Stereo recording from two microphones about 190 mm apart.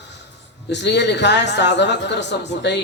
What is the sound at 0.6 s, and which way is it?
A man's voice, 65° left (ahead or behind).